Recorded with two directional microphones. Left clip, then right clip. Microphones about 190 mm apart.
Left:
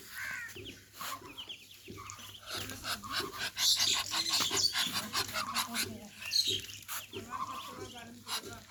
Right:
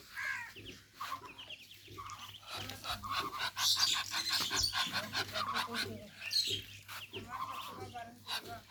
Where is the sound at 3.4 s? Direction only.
5° left (ahead or behind).